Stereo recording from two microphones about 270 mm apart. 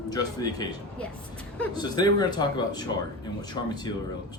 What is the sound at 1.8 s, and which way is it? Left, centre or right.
Speech, centre.